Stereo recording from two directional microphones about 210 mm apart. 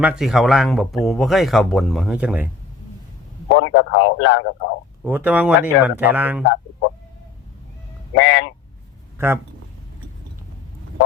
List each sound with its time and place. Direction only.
0.0 s speech: centre (ahead or behind)
3.5 s a man's voice: 60° left (ahead or behind)
5.0 s speech: 5° right (ahead or behind)
8.1 s speech: 60° left (ahead or behind)
9.1 s speech: 10° right (ahead or behind)